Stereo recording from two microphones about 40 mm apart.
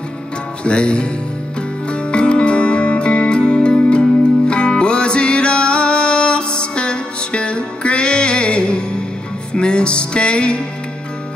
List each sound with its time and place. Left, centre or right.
0.7 s music: left